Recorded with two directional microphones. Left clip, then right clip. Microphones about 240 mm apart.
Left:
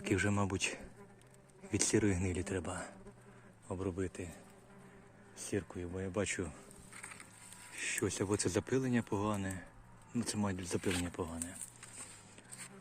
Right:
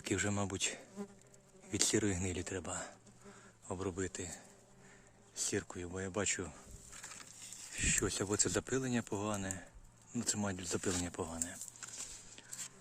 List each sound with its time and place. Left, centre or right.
0.0 s speech: centre
3.7 s speech: centre
7.8 s speech: centre